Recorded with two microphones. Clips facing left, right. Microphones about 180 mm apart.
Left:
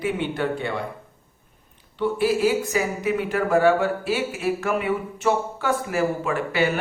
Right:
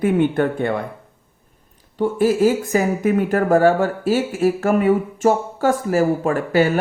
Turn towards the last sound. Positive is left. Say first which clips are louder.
# right 6 dB
turn(degrees=-45)  # may be behind; listen again after turning